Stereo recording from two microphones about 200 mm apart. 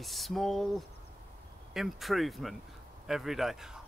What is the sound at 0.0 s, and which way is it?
Speech, centre (ahead or behind).